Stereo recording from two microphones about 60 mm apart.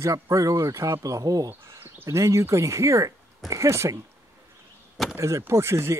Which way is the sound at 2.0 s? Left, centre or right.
Right.